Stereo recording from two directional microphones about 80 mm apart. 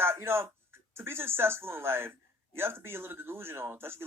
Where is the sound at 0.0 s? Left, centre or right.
Right.